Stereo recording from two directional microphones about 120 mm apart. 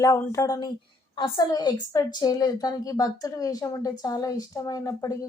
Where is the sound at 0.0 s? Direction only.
25° left (ahead or behind).